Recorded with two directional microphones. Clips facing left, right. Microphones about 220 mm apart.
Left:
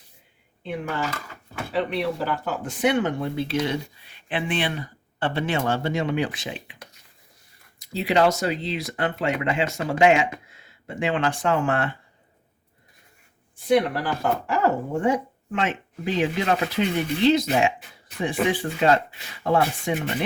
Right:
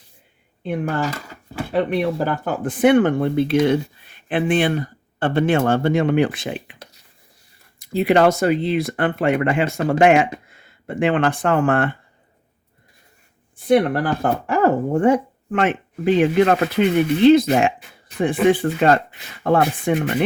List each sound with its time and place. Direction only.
0.6 s speech: 50° right (ahead or behind)
7.8 s speech: 55° right (ahead or behind)
13.7 s speech: 55° right (ahead or behind)